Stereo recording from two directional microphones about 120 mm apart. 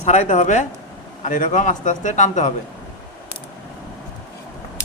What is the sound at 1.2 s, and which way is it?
A man's voice, 90° left.